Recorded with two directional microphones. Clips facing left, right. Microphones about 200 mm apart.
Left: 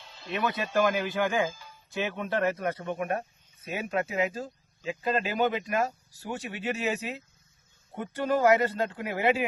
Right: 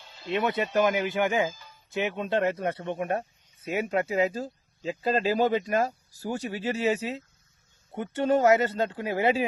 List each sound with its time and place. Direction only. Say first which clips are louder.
0.3 s speech: right 4 dB; 25° right (ahead or behind)